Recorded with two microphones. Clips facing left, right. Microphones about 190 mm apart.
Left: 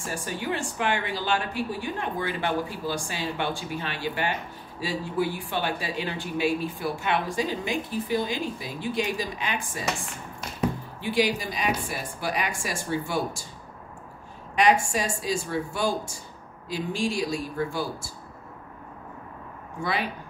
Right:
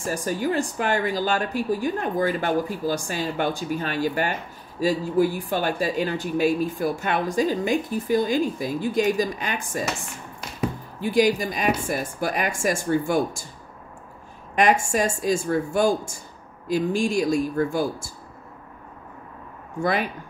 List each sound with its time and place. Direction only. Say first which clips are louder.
0.0 s speech: right 7 dB; 40° right (ahead or behind)
11.0 s speech: right 6 dB; 45° right (ahead or behind)
14.5 s speech: right 2 dB; 50° right (ahead or behind)
19.8 s speech: right 5 dB; 50° right (ahead or behind)